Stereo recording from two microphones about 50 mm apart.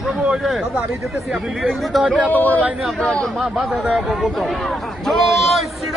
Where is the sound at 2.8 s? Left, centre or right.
Centre.